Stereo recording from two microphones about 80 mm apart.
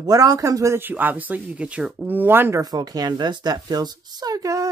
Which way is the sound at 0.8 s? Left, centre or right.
Right.